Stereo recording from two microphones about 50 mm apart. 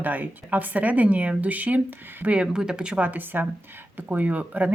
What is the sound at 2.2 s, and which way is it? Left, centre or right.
Speech, centre.